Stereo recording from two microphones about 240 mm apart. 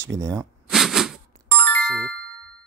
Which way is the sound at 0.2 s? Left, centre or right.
Centre.